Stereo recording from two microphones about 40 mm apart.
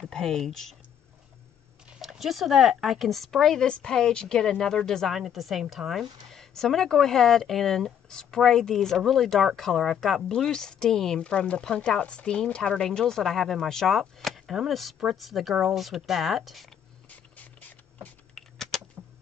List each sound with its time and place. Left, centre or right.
0.1 s speech: centre
2.0 s speech: centre
3.1 s speech: centre
5.0 s speech: centre
6.3 s speech: centre
18.3 s a sound: centre